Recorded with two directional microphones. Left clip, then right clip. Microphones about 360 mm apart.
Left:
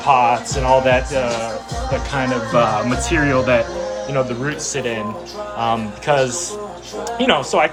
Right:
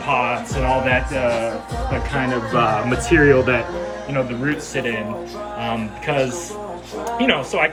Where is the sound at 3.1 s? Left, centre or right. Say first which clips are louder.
Right 2 dB; centre.